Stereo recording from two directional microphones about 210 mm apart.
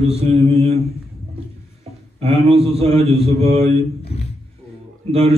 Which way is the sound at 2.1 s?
30° right (ahead or behind).